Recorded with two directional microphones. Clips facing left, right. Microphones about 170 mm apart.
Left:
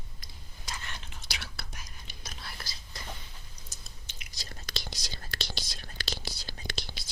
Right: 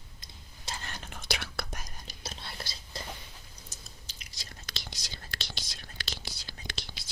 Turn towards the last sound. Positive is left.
turn(degrees=40)  # may be behind; listen again after turning